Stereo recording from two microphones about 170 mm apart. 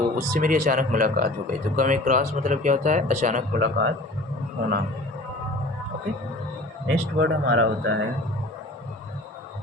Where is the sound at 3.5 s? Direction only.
70° right (ahead or behind).